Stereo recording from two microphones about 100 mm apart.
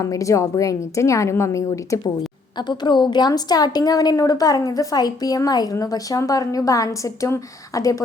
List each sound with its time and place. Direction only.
0.0 s a woman's voice: 35° left (ahead or behind)
2.6 s a woman's voice: 50° left (ahead or behind)